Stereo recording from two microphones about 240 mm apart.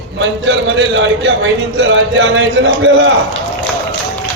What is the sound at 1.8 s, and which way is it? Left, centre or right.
Speech, right.